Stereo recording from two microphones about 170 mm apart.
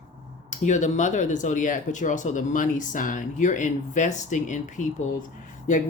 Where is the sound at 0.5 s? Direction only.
45° left (ahead or behind).